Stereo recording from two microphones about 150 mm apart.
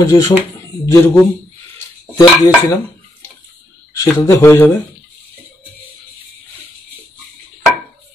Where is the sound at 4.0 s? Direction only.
25° left (ahead or behind).